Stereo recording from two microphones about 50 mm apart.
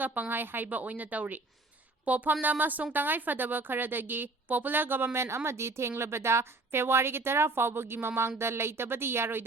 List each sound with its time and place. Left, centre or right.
0.0 s a woman's voice: right